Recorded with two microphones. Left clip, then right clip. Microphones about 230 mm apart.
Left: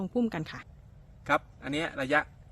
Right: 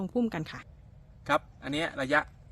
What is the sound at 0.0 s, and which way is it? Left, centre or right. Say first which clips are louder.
A woman's voice: even; centre.